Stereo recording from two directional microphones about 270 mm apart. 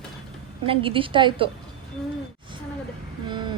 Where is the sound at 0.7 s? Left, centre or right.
Centre.